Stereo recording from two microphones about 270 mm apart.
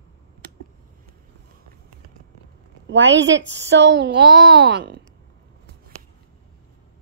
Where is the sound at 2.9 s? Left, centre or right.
Right.